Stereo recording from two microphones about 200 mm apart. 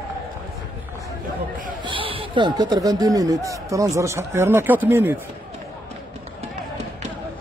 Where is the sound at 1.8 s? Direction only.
25° right (ahead or behind).